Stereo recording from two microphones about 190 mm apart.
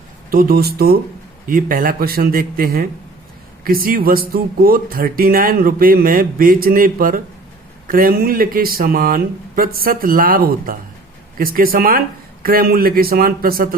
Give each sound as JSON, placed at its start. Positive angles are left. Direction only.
{"t": 0.3, "sound": "speech", "side_deg": -50}